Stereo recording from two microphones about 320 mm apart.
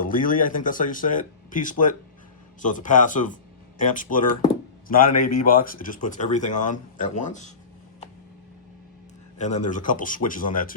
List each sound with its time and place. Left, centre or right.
0.0 s speech: left
9.4 s speech: left